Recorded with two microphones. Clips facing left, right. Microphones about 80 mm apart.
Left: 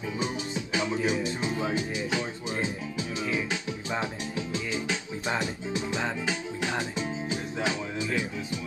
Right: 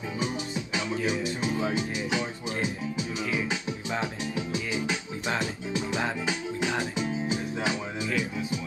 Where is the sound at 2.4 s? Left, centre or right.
Left.